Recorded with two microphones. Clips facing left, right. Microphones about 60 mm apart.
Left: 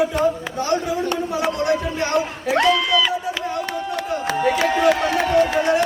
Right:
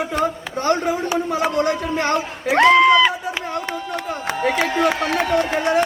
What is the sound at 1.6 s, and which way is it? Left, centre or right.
Music, right.